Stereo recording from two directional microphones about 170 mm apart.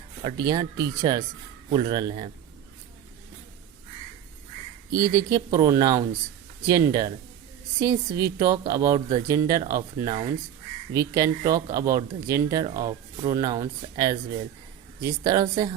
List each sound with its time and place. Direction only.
0.3 s a woman's voice: 25° right (ahead or behind)
4.9 s a woman's voice: 20° right (ahead or behind)